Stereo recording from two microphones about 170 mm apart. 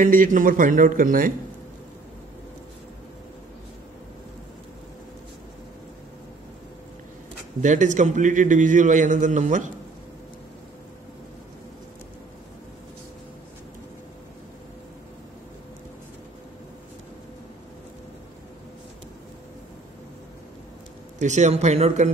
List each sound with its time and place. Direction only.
0.0 s a man's voice: 50° right (ahead or behind)
7.6 s a man's voice: 45° right (ahead or behind)
21.2 s speech: 45° right (ahead or behind)